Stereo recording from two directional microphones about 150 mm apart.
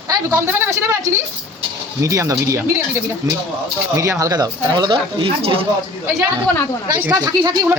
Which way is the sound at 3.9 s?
20° right (ahead or behind).